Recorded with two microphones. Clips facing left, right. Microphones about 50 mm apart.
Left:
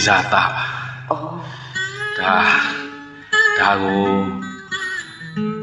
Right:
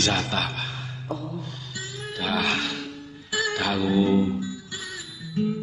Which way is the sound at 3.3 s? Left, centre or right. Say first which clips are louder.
Left 11 dB; left.